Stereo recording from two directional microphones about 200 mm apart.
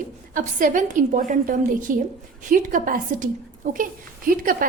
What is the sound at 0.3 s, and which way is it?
A woman's voice, 40° right (ahead or behind).